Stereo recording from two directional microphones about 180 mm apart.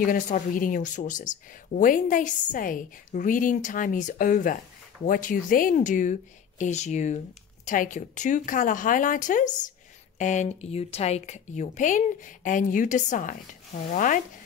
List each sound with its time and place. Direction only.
0.0 s speech: 50° left (ahead or behind)